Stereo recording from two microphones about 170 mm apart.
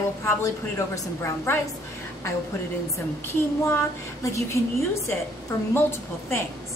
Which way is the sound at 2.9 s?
15° left (ahead or behind).